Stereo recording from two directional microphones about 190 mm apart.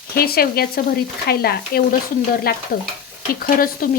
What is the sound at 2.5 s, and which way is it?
Stir, 50° left (ahead or behind).